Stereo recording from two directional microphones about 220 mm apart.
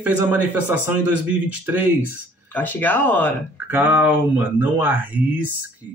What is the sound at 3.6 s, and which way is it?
Speech, 10° right (ahead or behind).